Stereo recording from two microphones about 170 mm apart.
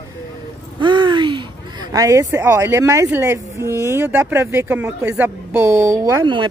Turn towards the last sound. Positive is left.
turn(degrees=-25)  # may be behind; listen again after turning